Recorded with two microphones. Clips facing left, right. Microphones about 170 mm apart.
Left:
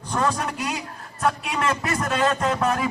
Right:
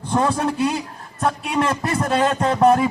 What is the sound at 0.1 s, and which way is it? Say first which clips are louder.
A man's voice: right 5 dB; 30° right (ahead or behind).